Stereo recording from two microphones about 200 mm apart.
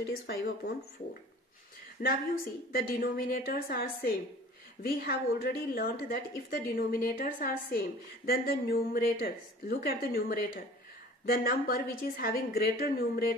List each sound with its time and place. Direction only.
0.0 s speech: 55° left (ahead or behind)
2.0 s a woman's voice: 45° left (ahead or behind)